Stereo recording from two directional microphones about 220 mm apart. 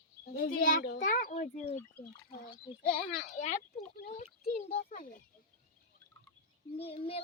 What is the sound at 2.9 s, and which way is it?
Speech, 35° left (ahead or behind).